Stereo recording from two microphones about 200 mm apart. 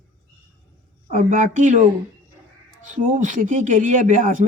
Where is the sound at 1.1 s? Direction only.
40° right (ahead or behind).